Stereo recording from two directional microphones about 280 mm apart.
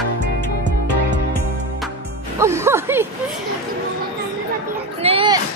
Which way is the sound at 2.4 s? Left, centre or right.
Centre.